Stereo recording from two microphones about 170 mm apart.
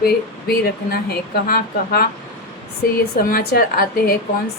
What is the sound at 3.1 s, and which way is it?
A woman's voice, 60° left (ahead or behind).